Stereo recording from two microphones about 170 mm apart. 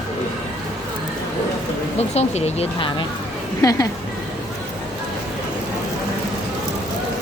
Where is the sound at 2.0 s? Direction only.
40° left (ahead or behind).